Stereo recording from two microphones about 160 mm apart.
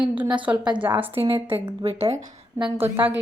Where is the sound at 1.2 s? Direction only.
35° right (ahead or behind).